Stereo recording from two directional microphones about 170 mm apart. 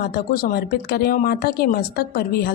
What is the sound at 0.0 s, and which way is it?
Speech, 65° left (ahead or behind).